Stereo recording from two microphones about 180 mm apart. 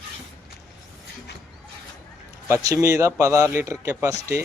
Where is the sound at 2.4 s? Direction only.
15° right (ahead or behind).